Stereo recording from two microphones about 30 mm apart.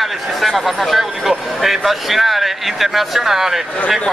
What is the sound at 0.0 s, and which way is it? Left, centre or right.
Speech, centre.